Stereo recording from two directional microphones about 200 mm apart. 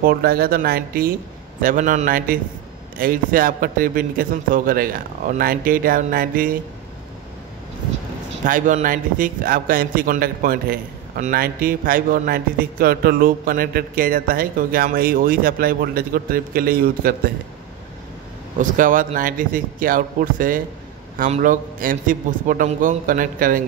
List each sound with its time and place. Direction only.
0.0 s a man's voice: 50° right (ahead or behind)
8.5 s a man's voice: 40° right (ahead or behind)
18.6 s a man's voice: 40° right (ahead or behind)